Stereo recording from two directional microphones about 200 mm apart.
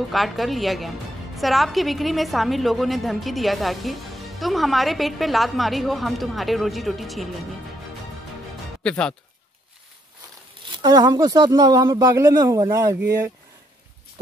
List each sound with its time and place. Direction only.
0.1 s a woman's voice: centre (ahead or behind)
8.8 s speech: 5° left (ahead or behind)
10.6 s speech: 20° right (ahead or behind)